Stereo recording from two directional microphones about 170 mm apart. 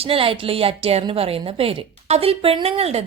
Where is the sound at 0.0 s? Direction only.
35° right (ahead or behind).